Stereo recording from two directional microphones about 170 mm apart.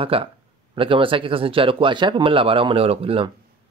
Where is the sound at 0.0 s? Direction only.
35° right (ahead or behind).